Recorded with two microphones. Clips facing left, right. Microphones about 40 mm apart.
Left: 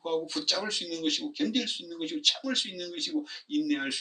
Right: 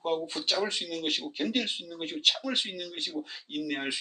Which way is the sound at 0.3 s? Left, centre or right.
Right.